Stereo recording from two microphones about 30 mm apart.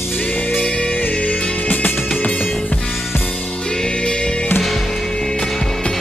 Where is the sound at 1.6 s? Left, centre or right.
Left.